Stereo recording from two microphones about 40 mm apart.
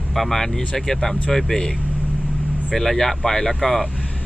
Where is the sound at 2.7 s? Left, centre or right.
Centre.